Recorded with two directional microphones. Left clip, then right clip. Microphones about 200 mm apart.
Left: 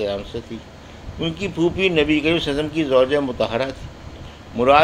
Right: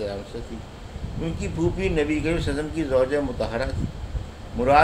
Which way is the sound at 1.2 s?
20° left (ahead or behind).